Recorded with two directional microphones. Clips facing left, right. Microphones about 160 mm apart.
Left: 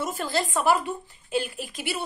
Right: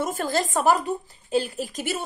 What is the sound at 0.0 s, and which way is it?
A woman's voice, 50° right (ahead or behind).